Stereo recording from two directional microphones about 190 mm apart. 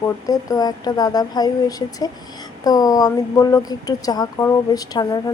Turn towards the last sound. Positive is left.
turn(degrees=20)  # may be behind; listen again after turning